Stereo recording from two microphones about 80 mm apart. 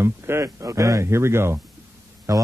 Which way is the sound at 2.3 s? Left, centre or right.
Right.